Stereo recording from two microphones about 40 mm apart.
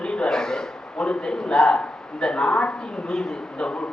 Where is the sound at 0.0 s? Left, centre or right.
Left.